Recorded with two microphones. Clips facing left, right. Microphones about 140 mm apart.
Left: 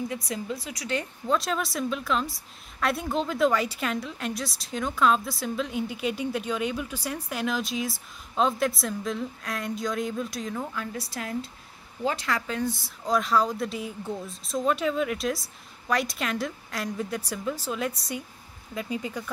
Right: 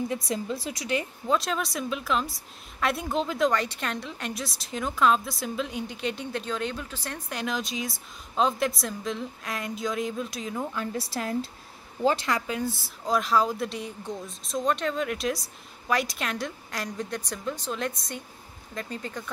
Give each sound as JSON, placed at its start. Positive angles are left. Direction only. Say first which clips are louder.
{"t": 0.1, "sound": "speech", "louder": "right 2 dB", "side_deg": -30}
{"t": 0.8, "sound": "speech", "louder": "even", "side_deg": -5}
{"t": 10.7, "sound": "speech", "louder": "right 3 dB", "side_deg": -30}
{"t": 12.3, "sound": "speech", "louder": "even", "side_deg": -15}